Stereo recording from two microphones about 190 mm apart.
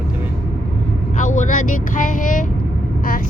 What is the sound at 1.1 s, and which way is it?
Speech, 40° left (ahead or behind).